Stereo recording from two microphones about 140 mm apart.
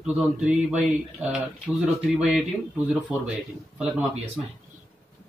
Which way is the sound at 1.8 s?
Centre (ahead or behind).